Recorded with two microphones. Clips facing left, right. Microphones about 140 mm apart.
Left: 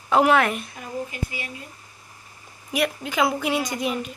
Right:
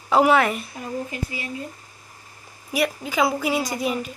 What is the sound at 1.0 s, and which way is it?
Speech, 30° right (ahead or behind).